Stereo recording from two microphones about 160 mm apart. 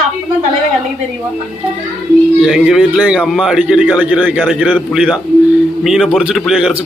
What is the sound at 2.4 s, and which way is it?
A man's voice, 5° right (ahead or behind).